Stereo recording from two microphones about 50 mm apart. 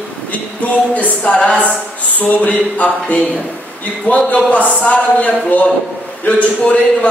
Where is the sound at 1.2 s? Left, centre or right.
Left.